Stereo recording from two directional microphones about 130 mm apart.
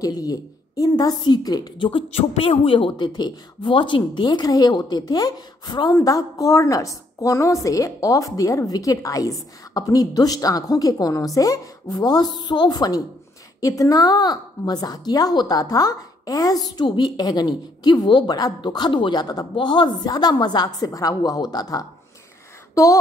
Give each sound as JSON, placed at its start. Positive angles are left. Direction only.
{"t": 0.0, "sound": "a woman's voice", "side_deg": 30}